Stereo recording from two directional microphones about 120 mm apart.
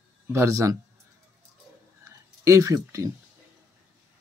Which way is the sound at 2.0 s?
25° right (ahead or behind).